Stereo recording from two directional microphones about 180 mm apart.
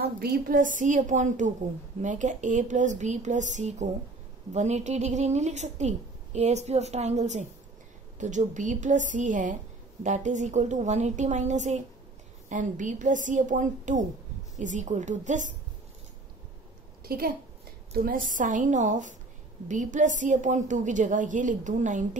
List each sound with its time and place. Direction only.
0.0 s a woman's voice: 60° right (ahead or behind); by 15.5 s 45° right (ahead or behind)
17.0 s a woman's voice: 55° right (ahead or behind)